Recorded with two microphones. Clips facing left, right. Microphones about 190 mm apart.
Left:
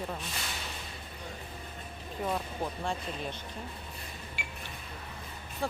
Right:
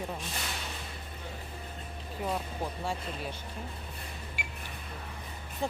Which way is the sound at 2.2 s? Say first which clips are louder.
Left 1 dB; 5° right (ahead or behind).